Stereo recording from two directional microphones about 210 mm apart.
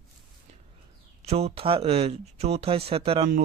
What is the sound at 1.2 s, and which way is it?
A man's voice, 30° right (ahead or behind).